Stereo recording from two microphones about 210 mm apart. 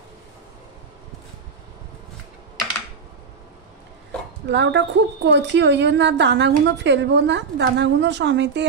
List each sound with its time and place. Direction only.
4.5 s a woman's voice: 60° right (ahead or behind)